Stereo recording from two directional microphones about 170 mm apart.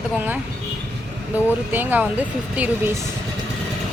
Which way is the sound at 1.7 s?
10° right (ahead or behind).